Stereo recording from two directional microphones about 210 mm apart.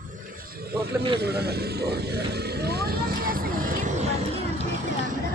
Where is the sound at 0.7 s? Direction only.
50° right (ahead or behind).